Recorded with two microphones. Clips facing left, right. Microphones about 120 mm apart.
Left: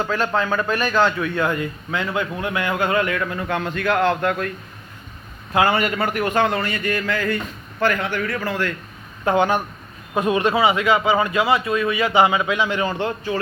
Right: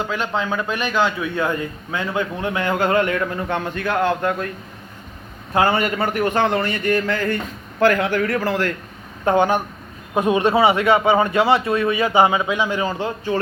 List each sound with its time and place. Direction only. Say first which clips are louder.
0.0 s a man's voice: left 2 dB; 20° right (ahead or behind)
5.5 s a man's voice: right 1 dB; 30° right (ahead or behind)
7.8 s a man's voice: right 4 dB; 50° right (ahead or behind)
10.2 s a man's voice: right 2 dB; 25° right (ahead or behind)
12.0 s a man's voice: even; 20° right (ahead or behind)
12.5 s a man's voice: even; 10° right (ahead or behind)